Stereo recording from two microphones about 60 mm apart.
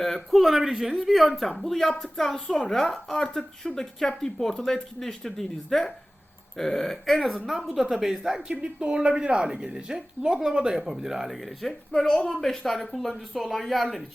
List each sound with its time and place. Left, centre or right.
0.0 s speech: centre
11.9 s speech: centre